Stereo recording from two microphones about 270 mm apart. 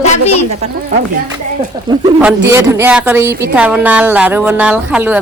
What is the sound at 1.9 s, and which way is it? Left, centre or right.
A man's voice, centre.